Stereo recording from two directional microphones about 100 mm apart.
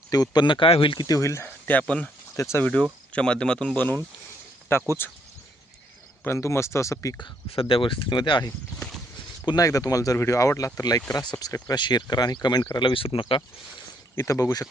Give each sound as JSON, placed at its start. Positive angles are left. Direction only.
{"t": 0.1, "sound": "speech", "side_deg": 45}
{"t": 1.0, "sound": "speech", "side_deg": 35}
{"t": 1.6, "sound": "speech", "side_deg": 15}
{"t": 2.3, "sound": "speech", "side_deg": 25}
{"t": 3.1, "sound": "speech", "side_deg": 10}
{"t": 4.7, "sound": "speech", "side_deg": 25}
{"t": 6.2, "sound": "speech", "side_deg": 25}
{"t": 7.5, "sound": "speech", "side_deg": 65}
{"t": 9.6, "sound": "speech", "side_deg": 35}
{"t": 12.7, "sound": "speech", "side_deg": 55}
{"t": 14.2, "sound": "speech", "side_deg": 30}